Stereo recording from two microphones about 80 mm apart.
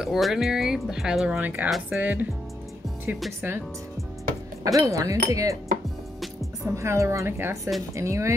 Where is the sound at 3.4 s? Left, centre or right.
Right.